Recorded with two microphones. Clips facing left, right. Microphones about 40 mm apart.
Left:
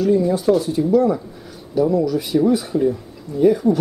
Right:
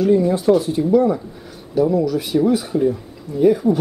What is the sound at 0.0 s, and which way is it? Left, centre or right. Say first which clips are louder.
Speech: right 1 dB; centre.